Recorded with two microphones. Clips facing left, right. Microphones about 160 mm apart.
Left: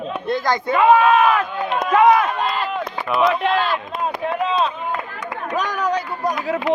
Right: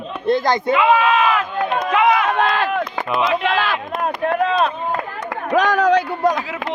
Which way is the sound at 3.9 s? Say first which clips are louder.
Right 3 dB; 60° right (ahead or behind).